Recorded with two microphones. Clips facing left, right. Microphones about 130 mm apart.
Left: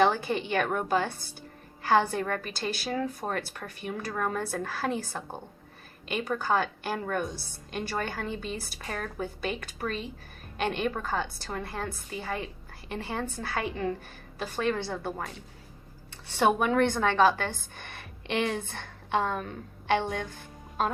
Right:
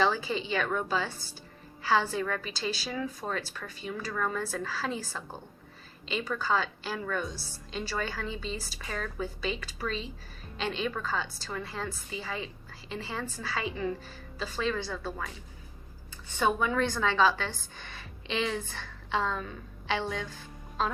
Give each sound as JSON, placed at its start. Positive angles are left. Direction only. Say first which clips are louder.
{"t": 0.0, "sound": "a woman's voice", "louder": "left 3 dB", "side_deg": 55}
{"t": 14.8, "sound": "speech", "louder": "left 3 dB", "side_deg": 20}
{"t": 16.2, "sound": "speech", "louder": "left 4 dB", "side_deg": 75}
{"t": 16.6, "sound": "a woman's voice", "louder": "left 4 dB", "side_deg": 65}